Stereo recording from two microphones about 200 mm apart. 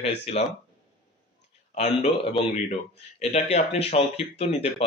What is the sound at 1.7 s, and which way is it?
Speech, 35° left (ahead or behind).